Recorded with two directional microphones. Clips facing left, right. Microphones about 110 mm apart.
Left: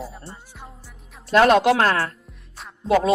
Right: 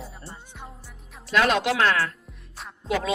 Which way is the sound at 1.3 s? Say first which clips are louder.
Left 7 dB; 40° left (ahead or behind).